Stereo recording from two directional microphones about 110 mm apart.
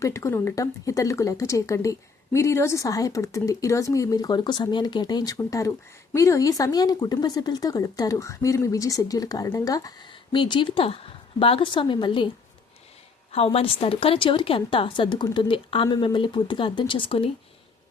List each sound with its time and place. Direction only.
0.0 s speech: 30° left (ahead or behind)
10.1 s a woman's voice: 45° left (ahead or behind)
13.3 s a woman's voice: 60° left (ahead or behind)